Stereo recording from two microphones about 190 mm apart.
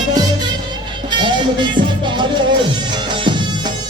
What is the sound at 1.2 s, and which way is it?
Music, 25° right (ahead or behind).